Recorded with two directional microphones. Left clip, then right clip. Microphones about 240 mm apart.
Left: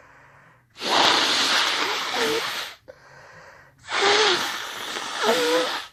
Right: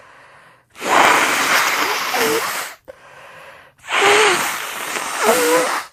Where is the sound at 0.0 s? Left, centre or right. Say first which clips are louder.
Right 7 dB; right.